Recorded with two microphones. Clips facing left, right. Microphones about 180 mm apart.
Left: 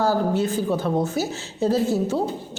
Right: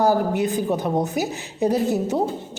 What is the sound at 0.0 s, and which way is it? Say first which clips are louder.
A woman's voice: right 2 dB; 15° right (ahead or behind).